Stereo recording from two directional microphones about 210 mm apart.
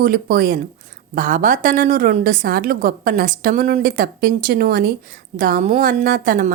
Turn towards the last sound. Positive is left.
turn(degrees=-40)  # may be behind; listen again after turning